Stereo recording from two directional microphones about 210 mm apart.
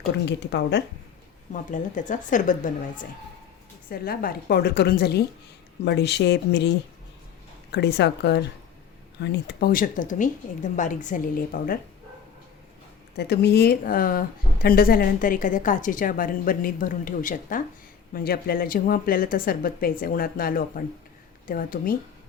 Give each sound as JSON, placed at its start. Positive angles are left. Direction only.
{"t": 0.3, "sound": "speech", "side_deg": 55}
{"t": 1.7, "sound": "a woman's voice", "side_deg": 35}
{"t": 13.1, "sound": "a woman's voice", "side_deg": 50}